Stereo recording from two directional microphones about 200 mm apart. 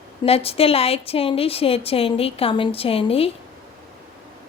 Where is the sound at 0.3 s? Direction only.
30° left (ahead or behind).